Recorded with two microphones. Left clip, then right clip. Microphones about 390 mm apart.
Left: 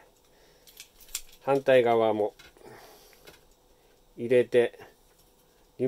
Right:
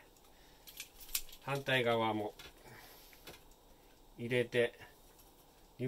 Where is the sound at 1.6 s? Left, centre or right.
Left.